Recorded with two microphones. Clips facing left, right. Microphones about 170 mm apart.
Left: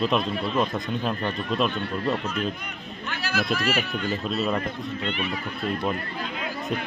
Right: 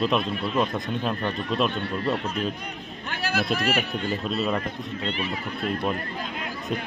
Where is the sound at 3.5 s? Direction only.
55° right (ahead or behind).